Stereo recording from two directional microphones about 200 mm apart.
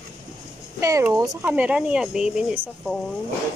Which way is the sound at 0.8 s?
15° right (ahead or behind).